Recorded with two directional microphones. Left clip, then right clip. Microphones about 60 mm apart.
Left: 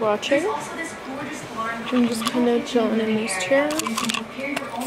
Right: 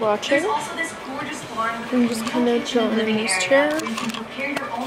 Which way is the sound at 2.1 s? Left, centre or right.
Centre.